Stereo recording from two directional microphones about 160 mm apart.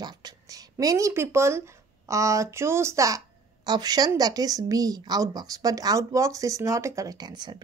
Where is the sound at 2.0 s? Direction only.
20° right (ahead or behind).